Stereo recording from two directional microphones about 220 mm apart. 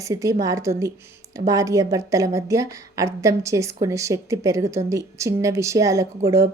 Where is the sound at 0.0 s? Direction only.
15° right (ahead or behind).